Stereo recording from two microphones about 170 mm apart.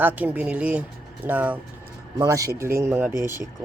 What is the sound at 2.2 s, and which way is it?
Speech, 20° right (ahead or behind).